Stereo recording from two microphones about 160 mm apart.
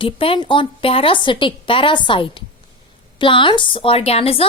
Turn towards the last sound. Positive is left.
turn(degrees=40)  # may be behind; listen again after turning